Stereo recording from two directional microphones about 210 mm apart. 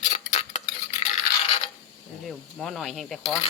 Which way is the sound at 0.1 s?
30° left (ahead or behind).